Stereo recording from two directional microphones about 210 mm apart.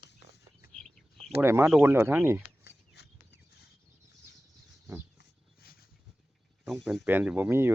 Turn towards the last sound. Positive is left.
turn(degrees=-10)  # may be behind; listen again after turning